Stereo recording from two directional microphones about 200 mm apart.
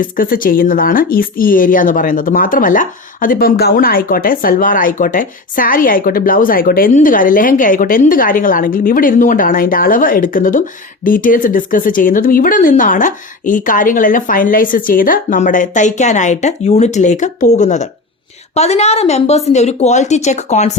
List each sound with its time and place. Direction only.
0.0 s speech: 45° left (ahead or behind)